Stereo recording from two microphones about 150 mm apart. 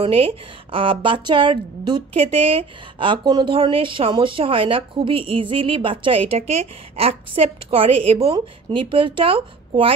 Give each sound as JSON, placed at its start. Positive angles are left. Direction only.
{"t": 0.0, "sound": "speech", "side_deg": -40}